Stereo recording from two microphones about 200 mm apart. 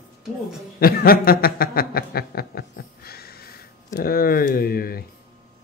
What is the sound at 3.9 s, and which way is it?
Speech, 45° left (ahead or behind).